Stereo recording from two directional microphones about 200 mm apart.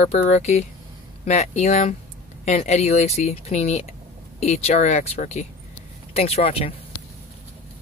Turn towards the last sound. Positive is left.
turn(degrees=30)  # may be behind; listen again after turning